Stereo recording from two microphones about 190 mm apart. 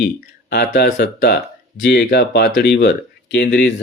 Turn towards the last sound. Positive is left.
turn(degrees=60)  # may be behind; listen again after turning